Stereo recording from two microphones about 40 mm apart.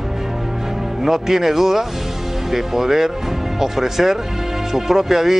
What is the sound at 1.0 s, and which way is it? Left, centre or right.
Speech, centre.